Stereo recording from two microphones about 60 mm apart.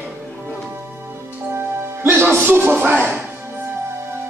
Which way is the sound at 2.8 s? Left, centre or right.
Right.